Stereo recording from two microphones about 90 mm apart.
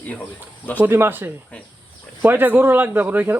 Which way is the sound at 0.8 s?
25° right (ahead or behind).